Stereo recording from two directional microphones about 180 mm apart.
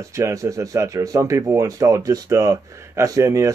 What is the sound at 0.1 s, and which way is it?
Speech, 15° right (ahead or behind).